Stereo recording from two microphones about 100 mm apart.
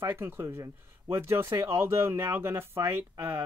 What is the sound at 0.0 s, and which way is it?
Speech, 20° right (ahead or behind).